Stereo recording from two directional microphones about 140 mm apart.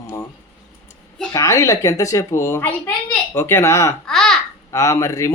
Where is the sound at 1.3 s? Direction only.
25° left (ahead or behind).